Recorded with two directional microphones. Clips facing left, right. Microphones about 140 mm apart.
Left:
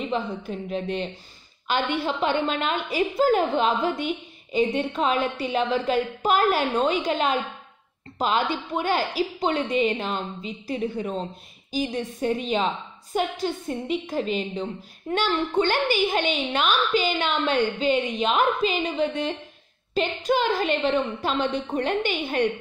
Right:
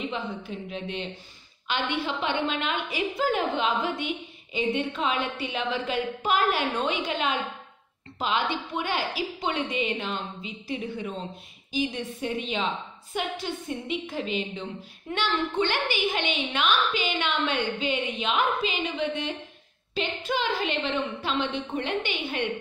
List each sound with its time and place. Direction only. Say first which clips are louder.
0.1 s a woman's voice: left 5 dB; 40° left (ahead or behind)